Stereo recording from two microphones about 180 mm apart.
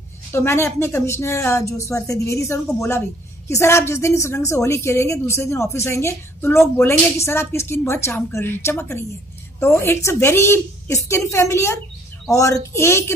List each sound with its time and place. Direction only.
0.3 s a woman's voice: 15° left (ahead or behind)